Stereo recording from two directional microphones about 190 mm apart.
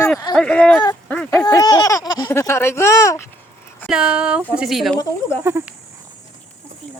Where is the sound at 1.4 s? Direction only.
20° left (ahead or behind).